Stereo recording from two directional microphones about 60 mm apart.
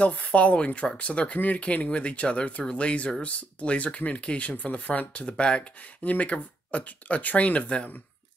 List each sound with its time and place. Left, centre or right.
0.0 s speech: left